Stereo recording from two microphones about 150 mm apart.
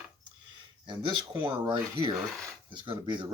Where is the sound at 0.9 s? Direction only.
30° right (ahead or behind).